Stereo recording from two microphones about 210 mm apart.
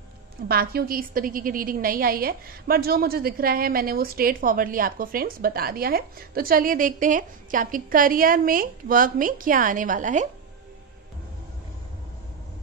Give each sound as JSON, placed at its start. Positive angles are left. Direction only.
{"t": 0.5, "sound": "a woman's voice", "side_deg": -45}